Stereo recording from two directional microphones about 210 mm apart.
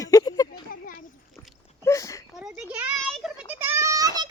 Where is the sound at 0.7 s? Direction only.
45° left (ahead or behind).